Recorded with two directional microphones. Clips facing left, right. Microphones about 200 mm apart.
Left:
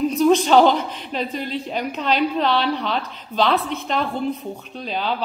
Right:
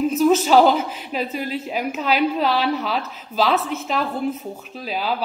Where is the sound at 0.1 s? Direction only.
5° right (ahead or behind).